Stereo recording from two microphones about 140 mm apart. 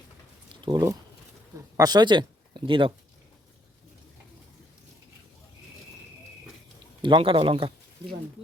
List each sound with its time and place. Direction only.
0.6 s speech: 25° right (ahead or behind)
7.0 s speech: 35° right (ahead or behind)